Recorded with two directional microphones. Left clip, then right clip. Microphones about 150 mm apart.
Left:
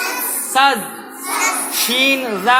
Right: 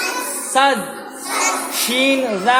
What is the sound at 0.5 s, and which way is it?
Speech, 25° right (ahead or behind).